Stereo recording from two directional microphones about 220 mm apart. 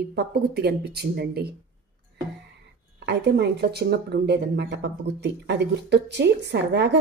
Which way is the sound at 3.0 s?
50° right (ahead or behind).